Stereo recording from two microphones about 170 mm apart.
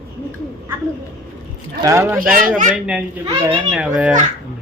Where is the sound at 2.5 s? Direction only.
50° right (ahead or behind).